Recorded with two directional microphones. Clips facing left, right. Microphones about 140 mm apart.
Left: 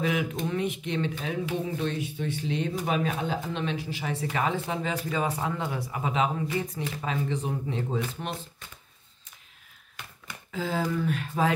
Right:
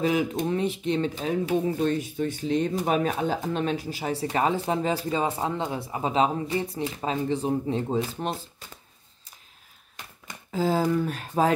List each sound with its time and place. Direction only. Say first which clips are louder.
0.0 s speech: right 4 dB; 35° right (ahead or behind)
10.5 s speech: right 6 dB; 35° right (ahead or behind)